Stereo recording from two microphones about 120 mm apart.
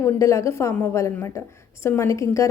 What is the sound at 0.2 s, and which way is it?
A woman's voice, 25° left (ahead or behind).